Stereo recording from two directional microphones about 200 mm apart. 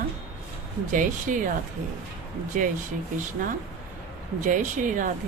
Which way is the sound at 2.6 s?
40° right (ahead or behind).